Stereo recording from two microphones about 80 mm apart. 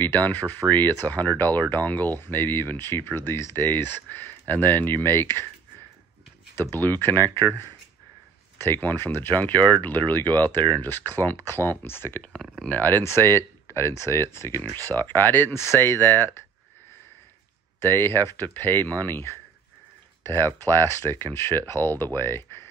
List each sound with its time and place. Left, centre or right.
0.0 s speech: left
6.5 s speech: left
8.5 s speech: left
10.2 s speech: right
10.8 s speech: left
12.2 s speech: centre
12.6 s speech: left
14.8 s speech: right
15.0 s speech: left
17.8 s speech: left
20.4 s speech: left